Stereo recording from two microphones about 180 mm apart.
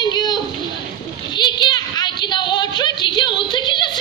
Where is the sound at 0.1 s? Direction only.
25° left (ahead or behind).